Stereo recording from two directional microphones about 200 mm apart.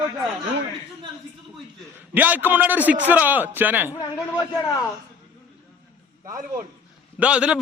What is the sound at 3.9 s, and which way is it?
Speech, 15° left (ahead or behind).